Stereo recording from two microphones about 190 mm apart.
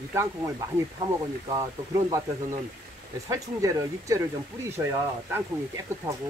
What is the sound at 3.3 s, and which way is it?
Speech, 15° right (ahead or behind).